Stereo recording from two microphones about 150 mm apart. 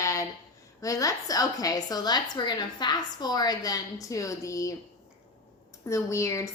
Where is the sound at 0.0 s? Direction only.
20° left (ahead or behind).